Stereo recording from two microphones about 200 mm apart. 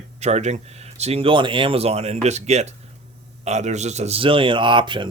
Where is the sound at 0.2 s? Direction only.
35° right (ahead or behind).